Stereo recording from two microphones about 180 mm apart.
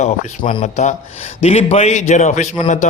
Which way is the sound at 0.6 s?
40° left (ahead or behind).